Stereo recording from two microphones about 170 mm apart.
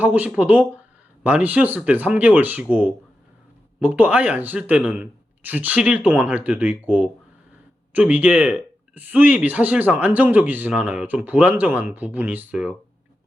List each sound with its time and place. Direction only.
0.0 s speech: 10° right (ahead or behind)